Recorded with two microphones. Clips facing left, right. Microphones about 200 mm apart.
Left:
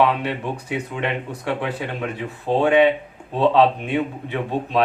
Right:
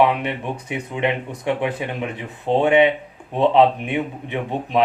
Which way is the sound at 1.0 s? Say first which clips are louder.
Right 7 dB; 20° right (ahead or behind).